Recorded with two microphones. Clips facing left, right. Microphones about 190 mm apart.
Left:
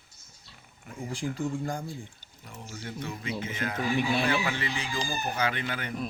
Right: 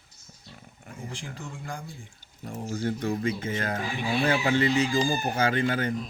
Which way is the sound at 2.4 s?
40° right (ahead or behind).